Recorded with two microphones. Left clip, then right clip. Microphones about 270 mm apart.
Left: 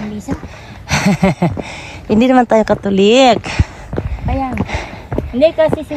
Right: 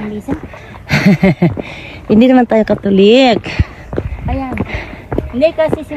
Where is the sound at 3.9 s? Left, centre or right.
Centre.